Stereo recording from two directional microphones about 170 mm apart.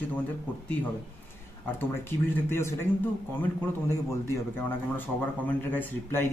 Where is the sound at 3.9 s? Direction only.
15° left (ahead or behind).